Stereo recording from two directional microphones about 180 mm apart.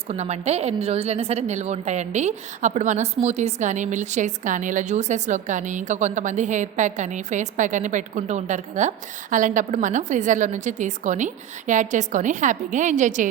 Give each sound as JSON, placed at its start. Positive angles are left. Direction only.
{"t": 0.1, "sound": "a woman's voice", "side_deg": -40}